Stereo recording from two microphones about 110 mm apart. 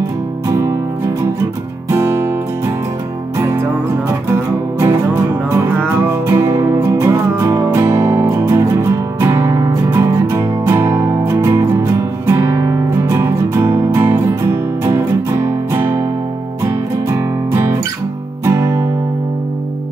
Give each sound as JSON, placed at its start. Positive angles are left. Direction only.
{"t": 0.5, "sound": "music", "side_deg": -25}
{"t": 1.9, "sound": "music", "side_deg": -20}
{"t": 5.5, "sound": "music", "side_deg": -25}
{"t": 18.4, "sound": "music", "side_deg": -25}